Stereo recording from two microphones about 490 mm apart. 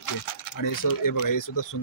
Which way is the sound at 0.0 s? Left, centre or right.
Left.